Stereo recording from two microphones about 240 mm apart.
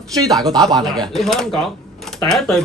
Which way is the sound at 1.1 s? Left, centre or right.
Centre.